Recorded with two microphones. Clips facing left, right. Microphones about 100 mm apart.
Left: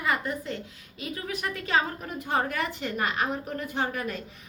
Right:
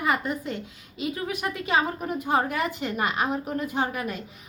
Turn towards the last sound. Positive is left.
turn(degrees=-15)  # may be behind; listen again after turning